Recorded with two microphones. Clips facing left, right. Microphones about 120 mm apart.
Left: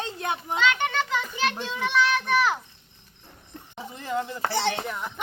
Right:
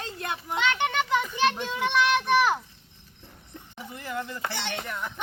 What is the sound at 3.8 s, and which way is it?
Speech, 20° left (ahead or behind).